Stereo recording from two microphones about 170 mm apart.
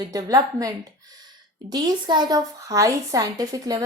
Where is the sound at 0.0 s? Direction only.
20° right (ahead or behind).